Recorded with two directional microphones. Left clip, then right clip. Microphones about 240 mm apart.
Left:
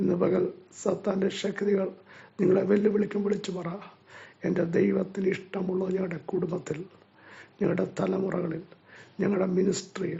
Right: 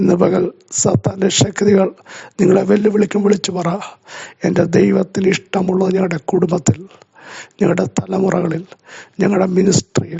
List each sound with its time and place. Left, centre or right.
0.0 s speech: right